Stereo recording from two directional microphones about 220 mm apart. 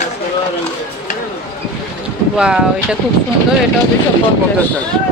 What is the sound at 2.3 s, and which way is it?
Speech, 5° right (ahead or behind).